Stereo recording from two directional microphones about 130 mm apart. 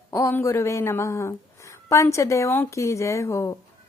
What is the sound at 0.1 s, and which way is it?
Speech, 20° left (ahead or behind).